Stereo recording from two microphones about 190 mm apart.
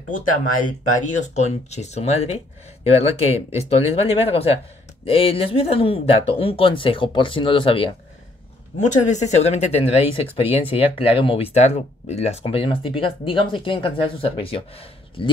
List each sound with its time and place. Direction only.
1.0 s speech: 40° left (ahead or behind)
8.7 s speech: 40° left (ahead or behind)